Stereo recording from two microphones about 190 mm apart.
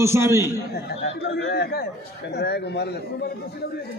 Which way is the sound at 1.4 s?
60° left (ahead or behind).